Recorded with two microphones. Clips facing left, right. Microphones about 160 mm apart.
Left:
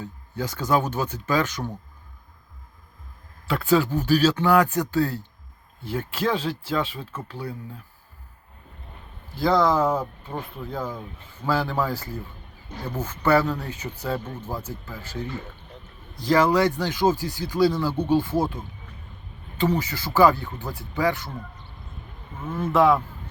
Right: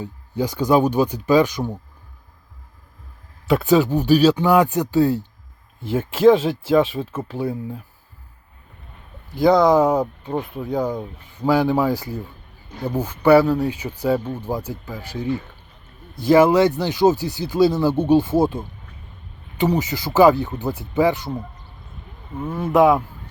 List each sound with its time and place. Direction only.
0.0 s speech: 15° right (ahead or behind)
3.4 s speech: 20° right (ahead or behind)
9.3 s speech: 20° right (ahead or behind)
16.2 s speech: 20° right (ahead or behind)
19.5 s speech: 20° right (ahead or behind)
22.5 s speech: 15° right (ahead or behind)